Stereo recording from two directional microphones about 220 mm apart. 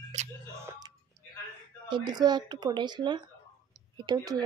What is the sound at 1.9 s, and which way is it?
Speech, 20° right (ahead or behind).